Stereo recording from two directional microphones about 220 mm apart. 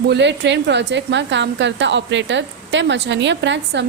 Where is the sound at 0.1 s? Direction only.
55° right (ahead or behind).